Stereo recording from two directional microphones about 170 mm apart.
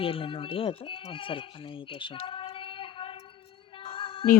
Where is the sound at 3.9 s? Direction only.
30° left (ahead or behind).